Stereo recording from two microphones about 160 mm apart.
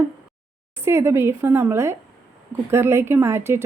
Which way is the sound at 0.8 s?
15° right (ahead or behind).